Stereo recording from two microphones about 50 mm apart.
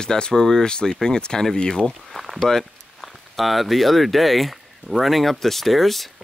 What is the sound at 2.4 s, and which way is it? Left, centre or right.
Speech, centre.